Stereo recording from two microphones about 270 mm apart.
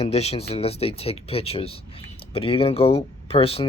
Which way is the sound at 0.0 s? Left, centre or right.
Left.